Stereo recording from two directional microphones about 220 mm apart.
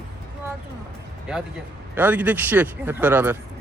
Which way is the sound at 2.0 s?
5° right (ahead or behind).